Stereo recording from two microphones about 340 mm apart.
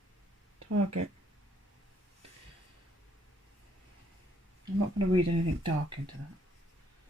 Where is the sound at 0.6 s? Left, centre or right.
Right.